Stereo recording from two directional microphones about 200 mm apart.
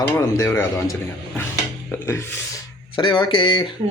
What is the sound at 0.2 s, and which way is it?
Speech, 15° left (ahead or behind).